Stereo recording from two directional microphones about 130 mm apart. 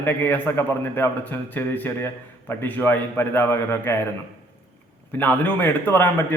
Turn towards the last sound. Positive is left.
turn(degrees=15)  # may be behind; listen again after turning